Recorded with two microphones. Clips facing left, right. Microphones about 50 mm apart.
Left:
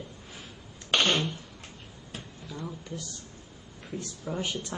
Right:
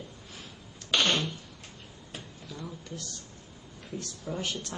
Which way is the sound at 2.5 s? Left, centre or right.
Centre.